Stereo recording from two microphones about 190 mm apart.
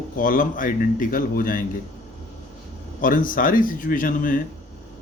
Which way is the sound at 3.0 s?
45° left (ahead or behind).